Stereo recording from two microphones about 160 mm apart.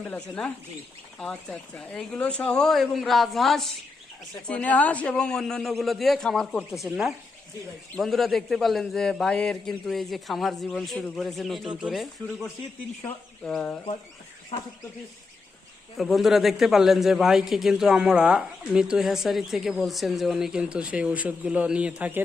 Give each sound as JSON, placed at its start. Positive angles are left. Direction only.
{"t": 0.1, "sound": "a man's voice", "side_deg": 5}
{"t": 14.5, "sound": "speech", "side_deg": 30}
{"t": 16.0, "sound": "a man's voice", "side_deg": 0}